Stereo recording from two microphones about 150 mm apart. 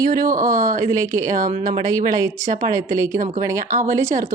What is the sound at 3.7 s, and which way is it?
Speech, 60° right (ahead or behind).